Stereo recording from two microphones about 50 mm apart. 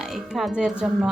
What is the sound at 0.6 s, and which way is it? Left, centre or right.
Speech, centre.